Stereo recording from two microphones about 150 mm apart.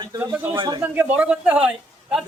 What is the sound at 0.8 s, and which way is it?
Speech, 10° right (ahead or behind).